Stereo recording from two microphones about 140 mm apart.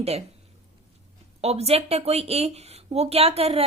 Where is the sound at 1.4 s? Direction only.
50° right (ahead or behind).